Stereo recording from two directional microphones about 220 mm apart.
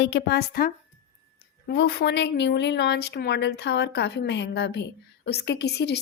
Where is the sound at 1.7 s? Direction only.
50° left (ahead or behind).